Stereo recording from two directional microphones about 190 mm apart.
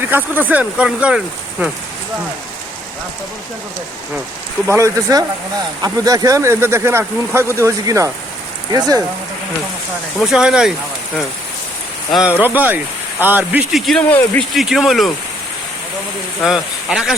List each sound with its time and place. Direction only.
0.0 s speech: 10° right (ahead or behind)
4.7 s speech: 15° right (ahead or behind)
10.2 s speech: 5° right (ahead or behind)
12.1 s speech: 5° right (ahead or behind)
16.4 s speech: centre (ahead or behind)